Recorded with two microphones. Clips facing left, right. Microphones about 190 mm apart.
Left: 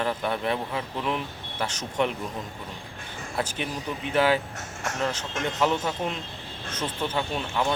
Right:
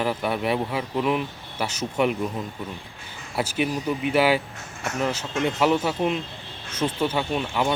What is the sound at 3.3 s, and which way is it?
Speech, 10° right (ahead or behind).